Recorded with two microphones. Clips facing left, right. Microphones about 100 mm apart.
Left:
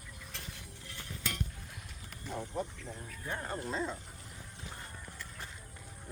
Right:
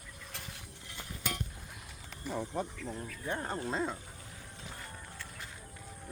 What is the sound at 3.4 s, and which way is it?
Speech, 45° right (ahead or behind).